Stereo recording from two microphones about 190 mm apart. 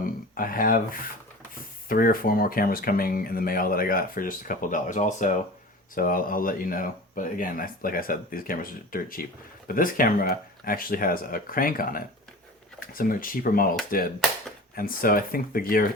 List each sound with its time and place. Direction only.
0.0 s speech: 50° left (ahead or behind)
14.8 s speech: 50° left (ahead or behind)